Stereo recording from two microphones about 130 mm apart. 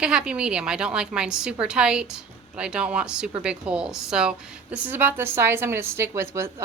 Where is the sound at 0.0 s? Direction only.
5° right (ahead or behind).